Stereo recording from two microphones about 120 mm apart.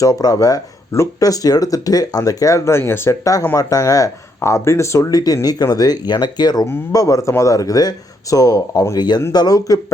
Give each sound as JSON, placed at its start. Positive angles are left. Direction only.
{"t": 0.0, "sound": "speech", "side_deg": 30}